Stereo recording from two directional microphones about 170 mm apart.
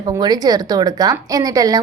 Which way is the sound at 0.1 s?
25° right (ahead or behind).